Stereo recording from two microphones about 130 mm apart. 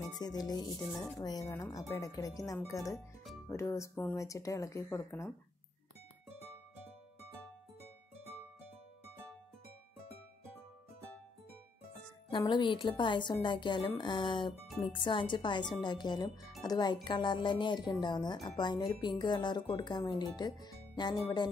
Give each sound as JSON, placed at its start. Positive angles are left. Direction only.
{"t": 0.1, "sound": "speech", "side_deg": 30}
{"t": 12.3, "sound": "speech", "side_deg": 35}